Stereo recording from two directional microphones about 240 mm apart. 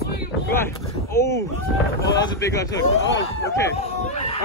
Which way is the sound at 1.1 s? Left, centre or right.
Centre.